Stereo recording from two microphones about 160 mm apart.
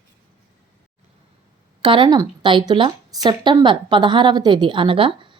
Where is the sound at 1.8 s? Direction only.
30° right (ahead or behind).